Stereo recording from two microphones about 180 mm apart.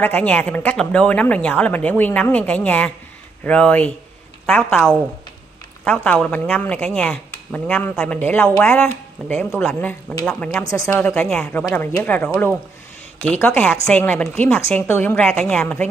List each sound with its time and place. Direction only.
0.0 s speech: 10° left (ahead or behind)
11.0 s speech: 5° left (ahead or behind)